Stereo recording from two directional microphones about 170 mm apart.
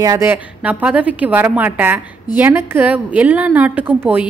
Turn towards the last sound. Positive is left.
turn(degrees=-10)  # may be behind; listen again after turning